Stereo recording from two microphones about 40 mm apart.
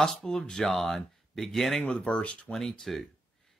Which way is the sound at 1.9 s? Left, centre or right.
Left.